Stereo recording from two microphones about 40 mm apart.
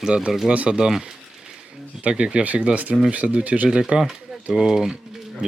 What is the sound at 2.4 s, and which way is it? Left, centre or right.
Speech, right.